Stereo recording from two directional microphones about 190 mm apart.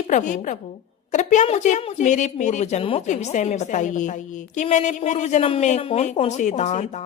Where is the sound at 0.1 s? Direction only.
45° left (ahead or behind).